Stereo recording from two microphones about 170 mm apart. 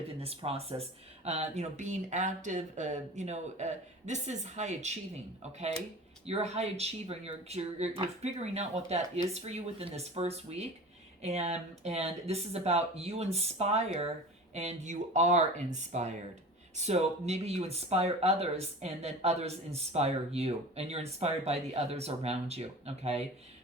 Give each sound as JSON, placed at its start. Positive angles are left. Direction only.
{"t": 0.2, "sound": "speech", "side_deg": -35}